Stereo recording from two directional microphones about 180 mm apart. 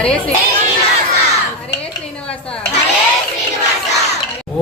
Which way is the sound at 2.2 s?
5° left (ahead or behind).